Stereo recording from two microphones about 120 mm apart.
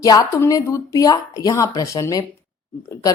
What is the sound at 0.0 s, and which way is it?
Speech, 30° left (ahead or behind).